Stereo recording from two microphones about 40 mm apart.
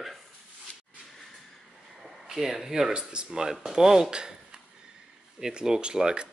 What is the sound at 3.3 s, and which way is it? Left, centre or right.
Speech, centre.